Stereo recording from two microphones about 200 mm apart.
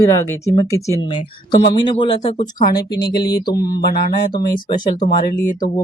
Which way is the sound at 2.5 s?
45° left (ahead or behind).